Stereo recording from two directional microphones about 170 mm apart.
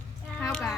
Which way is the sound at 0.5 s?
Centre (ahead or behind).